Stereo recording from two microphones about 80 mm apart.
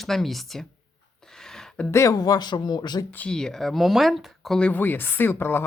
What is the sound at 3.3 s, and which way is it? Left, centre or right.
Speech, centre.